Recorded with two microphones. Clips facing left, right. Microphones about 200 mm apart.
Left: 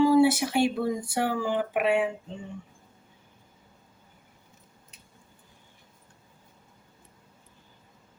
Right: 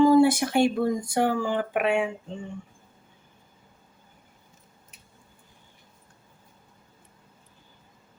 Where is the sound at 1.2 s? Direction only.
50° right (ahead or behind).